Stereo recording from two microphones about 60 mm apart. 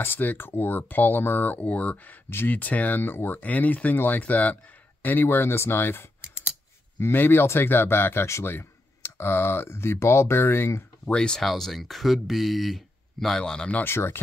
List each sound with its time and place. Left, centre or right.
0.0 s speech: left
2.2 s speech: left
2.5 s speech: left
5.0 s speech: left
6.2 s scissors: centre
7.0 s speech: left
11.1 s speech: centre
11.4 s speech: centre
13.4 s speech: centre
13.8 s speech: left